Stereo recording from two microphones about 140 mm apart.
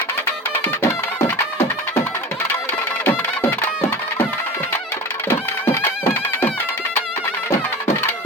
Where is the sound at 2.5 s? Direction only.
15° left (ahead or behind).